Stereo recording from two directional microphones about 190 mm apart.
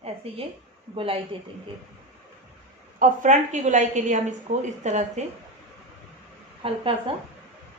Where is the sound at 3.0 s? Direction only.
40° right (ahead or behind).